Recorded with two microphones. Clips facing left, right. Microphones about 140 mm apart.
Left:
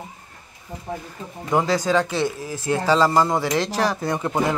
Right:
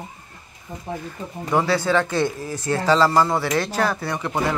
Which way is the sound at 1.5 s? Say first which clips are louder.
Even; 20° left (ahead or behind).